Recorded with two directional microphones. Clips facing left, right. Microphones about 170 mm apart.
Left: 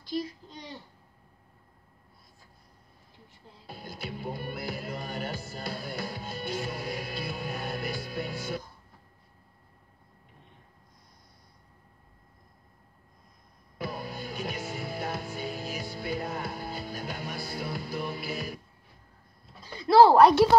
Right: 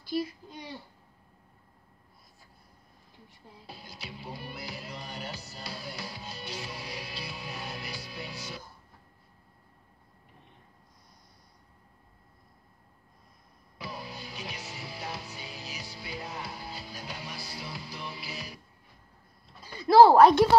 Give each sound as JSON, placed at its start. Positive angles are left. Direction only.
{"t": 0.0, "sound": "a child's voice", "side_deg": -5}
{"t": 3.6, "sound": "music", "side_deg": 50}
{"t": 13.7, "sound": "music", "side_deg": 50}
{"t": 19.6, "sound": "a sound", "side_deg": -10}